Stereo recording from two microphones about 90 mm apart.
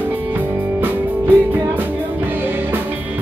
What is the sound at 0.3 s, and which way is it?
Music, 20° right (ahead or behind).